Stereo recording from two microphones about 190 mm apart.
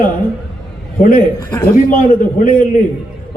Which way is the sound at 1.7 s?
45° left (ahead or behind).